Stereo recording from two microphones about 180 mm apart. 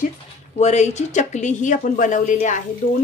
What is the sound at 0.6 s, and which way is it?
Speech, 40° left (ahead or behind).